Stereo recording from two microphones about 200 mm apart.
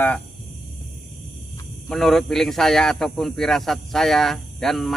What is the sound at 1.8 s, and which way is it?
Speech, centre (ahead or behind).